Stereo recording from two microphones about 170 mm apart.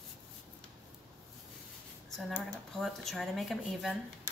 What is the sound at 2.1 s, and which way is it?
Speech, centre (ahead or behind).